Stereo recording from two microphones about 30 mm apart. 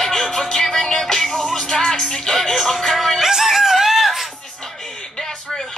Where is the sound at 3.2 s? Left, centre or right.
Centre.